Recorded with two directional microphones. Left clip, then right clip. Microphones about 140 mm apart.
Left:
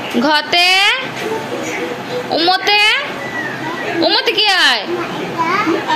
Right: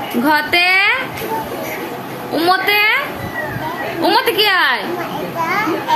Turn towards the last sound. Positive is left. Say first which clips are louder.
# left 1 dB
turn(degrees=-25)  # may be behind; listen again after turning